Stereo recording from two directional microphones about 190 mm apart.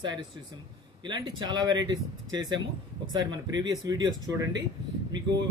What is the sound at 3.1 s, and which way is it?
Speech, 20° right (ahead or behind).